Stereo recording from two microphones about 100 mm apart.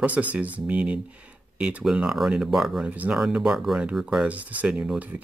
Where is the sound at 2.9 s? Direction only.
15° right (ahead or behind).